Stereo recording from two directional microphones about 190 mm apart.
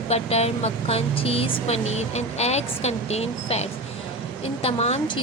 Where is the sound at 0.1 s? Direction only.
35° left (ahead or behind).